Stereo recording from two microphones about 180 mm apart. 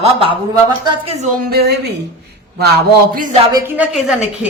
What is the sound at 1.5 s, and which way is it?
A man's voice, 60° right (ahead or behind).